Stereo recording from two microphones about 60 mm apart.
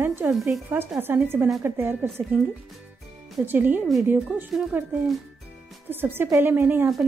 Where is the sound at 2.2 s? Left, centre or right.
Right.